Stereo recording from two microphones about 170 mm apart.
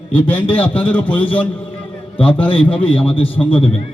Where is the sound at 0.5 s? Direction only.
10° left (ahead or behind).